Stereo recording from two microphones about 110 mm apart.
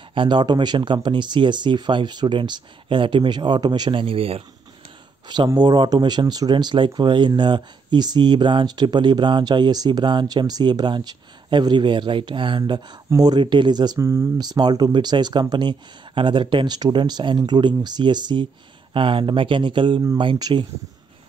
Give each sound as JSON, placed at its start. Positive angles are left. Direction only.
{"t": 0.1, "sound": "speech", "side_deg": -50}
{"t": 5.6, "sound": "speech", "side_deg": -40}
{"t": 13.9, "sound": "speech", "side_deg": -25}
{"t": 14.4, "sound": "speech", "side_deg": -35}